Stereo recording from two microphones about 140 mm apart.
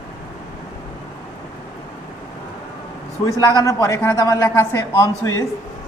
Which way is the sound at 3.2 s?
25° left (ahead or behind).